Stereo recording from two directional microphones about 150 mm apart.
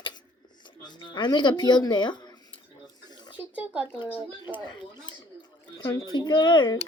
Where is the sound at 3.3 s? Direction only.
10° right (ahead or behind).